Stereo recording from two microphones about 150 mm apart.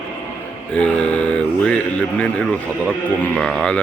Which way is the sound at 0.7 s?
5° left (ahead or behind).